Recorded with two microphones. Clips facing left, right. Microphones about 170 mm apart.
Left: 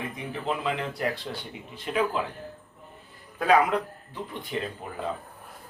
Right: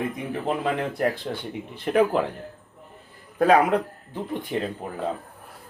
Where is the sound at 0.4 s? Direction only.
50° right (ahead or behind).